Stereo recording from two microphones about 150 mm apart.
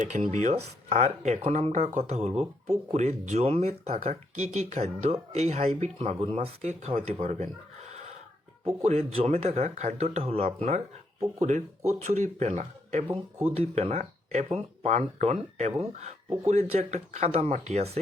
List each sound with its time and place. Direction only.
0.1 s speech: 50° right (ahead or behind)
8.6 s speech: 45° right (ahead or behind)